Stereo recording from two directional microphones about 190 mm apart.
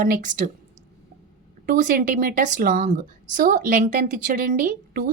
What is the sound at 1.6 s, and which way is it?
Speech, 45° right (ahead or behind).